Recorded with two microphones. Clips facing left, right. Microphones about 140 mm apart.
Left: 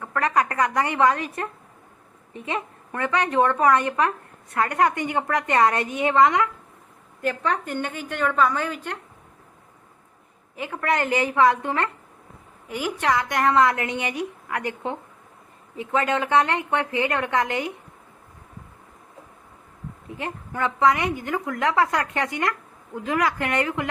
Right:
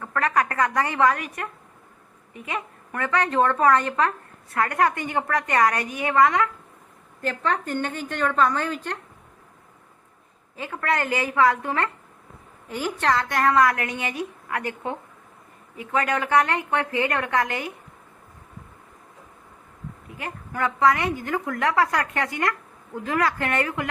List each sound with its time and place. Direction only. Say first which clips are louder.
0.0 s a woman's voice: left 1 dB; 20° left (ahead or behind)
10.6 s a woman's voice: left 1 dB; 15° left (ahead or behind)
20.1 s a woman's voice: left 4 dB; 25° left (ahead or behind)